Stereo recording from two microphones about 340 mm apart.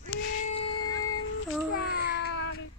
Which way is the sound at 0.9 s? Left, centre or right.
Left.